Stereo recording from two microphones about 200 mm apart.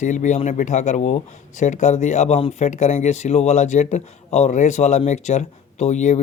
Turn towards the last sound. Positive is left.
turn(degrees=35)  # may be behind; listen again after turning